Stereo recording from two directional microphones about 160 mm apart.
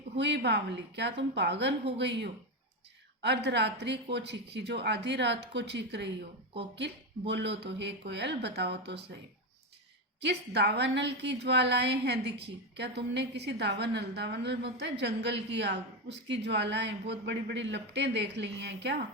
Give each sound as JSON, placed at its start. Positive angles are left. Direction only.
{"t": 0.2, "sound": "a woman's voice", "side_deg": -90}
{"t": 10.2, "sound": "a woman's voice", "side_deg": -90}